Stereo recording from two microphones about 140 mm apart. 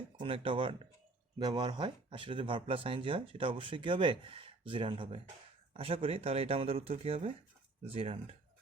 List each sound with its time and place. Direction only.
0.2 s speech: 40° right (ahead or behind)